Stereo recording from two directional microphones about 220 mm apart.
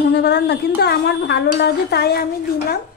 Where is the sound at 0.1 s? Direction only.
50° left (ahead or behind).